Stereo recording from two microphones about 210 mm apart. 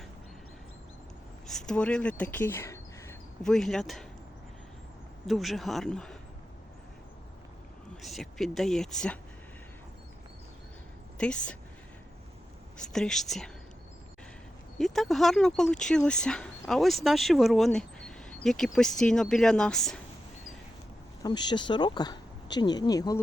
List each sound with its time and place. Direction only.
1.5 s speech: centre (ahead or behind)
3.4 s speech: centre (ahead or behind)
5.2 s speech: centre (ahead or behind)
8.0 s speech: centre (ahead or behind)
11.2 s speech: 5° left (ahead or behind)
12.7 s speech: 5° left (ahead or behind)
14.8 s speech: centre (ahead or behind)
21.2 s speech: 20° left (ahead or behind)